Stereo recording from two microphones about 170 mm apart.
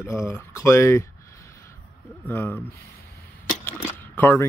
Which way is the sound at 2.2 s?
10° left (ahead or behind).